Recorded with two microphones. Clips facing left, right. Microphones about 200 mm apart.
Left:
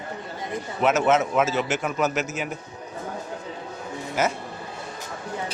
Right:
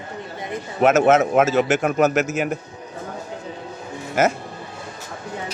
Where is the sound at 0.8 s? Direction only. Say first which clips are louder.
Right 5 dB; 50° right (ahead or behind).